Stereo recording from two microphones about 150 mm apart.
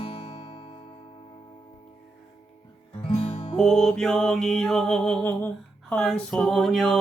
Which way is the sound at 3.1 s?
45° left (ahead or behind).